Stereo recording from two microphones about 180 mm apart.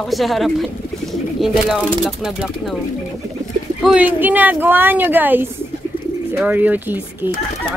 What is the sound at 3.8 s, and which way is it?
A woman's voice, 5° right (ahead or behind).